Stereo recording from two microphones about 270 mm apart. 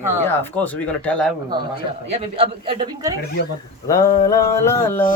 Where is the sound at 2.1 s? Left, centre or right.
Right.